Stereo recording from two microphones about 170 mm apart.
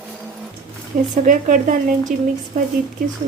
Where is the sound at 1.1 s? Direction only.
45° right (ahead or behind).